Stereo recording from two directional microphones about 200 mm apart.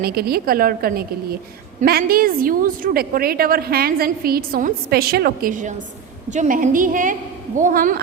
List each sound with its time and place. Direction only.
0.0 s a woman's voice: 50° right (ahead or behind)